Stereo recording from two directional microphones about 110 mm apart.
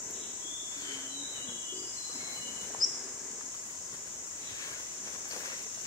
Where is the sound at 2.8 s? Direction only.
35° right (ahead or behind).